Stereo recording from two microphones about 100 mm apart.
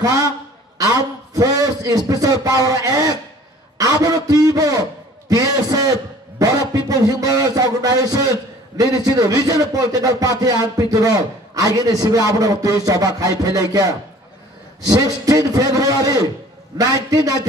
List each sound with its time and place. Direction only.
0.7 s a man's voice: 35° right (ahead or behind)